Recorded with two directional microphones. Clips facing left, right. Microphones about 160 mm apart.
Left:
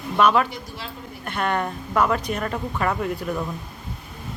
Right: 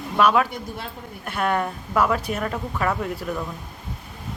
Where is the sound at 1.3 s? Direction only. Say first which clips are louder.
Right 1 dB; 5° right (ahead or behind).